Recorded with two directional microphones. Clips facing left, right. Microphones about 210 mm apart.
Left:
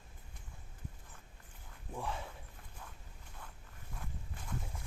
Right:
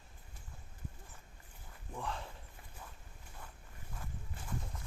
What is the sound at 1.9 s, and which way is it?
Speech, 10° left (ahead or behind).